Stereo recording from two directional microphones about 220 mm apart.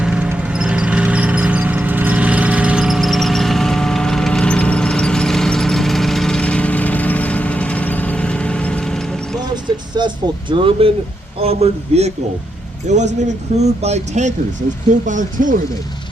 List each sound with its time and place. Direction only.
0.0 s a sound: 5° right (ahead or behind)
10.0 s vehicle: 20° right (ahead or behind)
10.5 s a man's voice: 25° right (ahead or behind)
13.1 s speech: 30° right (ahead or behind)